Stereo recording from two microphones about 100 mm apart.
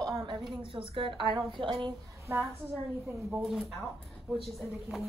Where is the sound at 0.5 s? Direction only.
65° right (ahead or behind).